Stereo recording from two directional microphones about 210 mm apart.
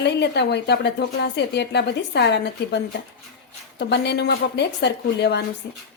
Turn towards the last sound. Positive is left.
turn(degrees=55)  # may be behind; listen again after turning